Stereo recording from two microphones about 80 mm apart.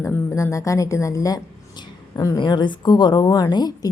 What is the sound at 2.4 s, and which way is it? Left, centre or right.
A woman's voice, left.